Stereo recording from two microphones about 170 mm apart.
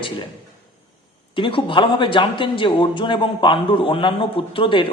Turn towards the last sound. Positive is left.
turn(degrees=30)  # may be behind; listen again after turning